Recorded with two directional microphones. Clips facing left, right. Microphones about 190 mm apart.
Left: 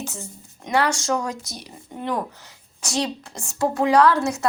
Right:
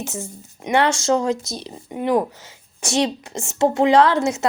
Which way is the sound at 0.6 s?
25° right (ahead or behind).